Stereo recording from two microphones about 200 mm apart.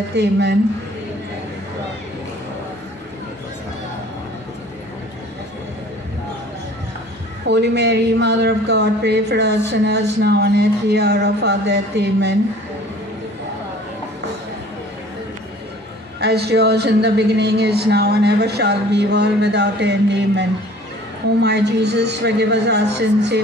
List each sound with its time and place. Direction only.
0.1 s speech: 60° right (ahead or behind)
7.4 s speech: 60° right (ahead or behind)
16.2 s speech: 55° right (ahead or behind)